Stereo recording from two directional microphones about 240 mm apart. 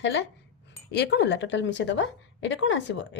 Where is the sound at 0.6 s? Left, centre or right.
Left.